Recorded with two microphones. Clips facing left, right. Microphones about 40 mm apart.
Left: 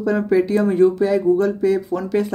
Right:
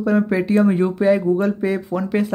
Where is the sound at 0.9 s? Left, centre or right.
Right.